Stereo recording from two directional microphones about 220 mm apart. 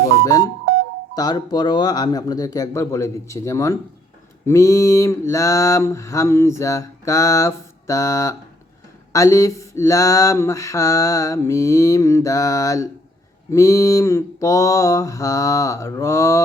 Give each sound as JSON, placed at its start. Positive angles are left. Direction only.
{"t": 0.3, "sound": "mantra", "side_deg": 15}